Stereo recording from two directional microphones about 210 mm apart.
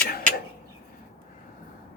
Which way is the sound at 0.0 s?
45° left (ahead or behind).